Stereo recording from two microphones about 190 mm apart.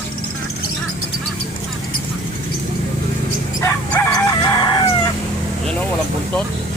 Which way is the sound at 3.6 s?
15° left (ahead or behind).